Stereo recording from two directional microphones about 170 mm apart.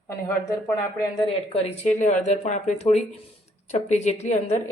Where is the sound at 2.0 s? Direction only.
45° left (ahead or behind).